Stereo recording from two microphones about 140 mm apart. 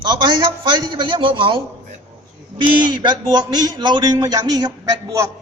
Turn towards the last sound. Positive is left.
turn(degrees=-25)  # may be behind; listen again after turning